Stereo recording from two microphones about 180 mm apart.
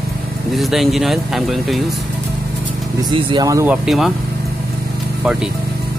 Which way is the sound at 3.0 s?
25° right (ahead or behind).